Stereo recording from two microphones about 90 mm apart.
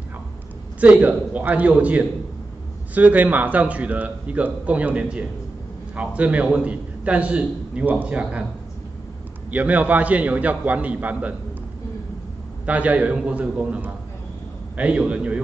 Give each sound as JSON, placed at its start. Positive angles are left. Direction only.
{"t": 0.7, "sound": "a man's voice", "side_deg": -15}
{"t": 9.5, "sound": "a man's voice", "side_deg": -15}
{"t": 12.6, "sound": "a man's voice", "side_deg": -15}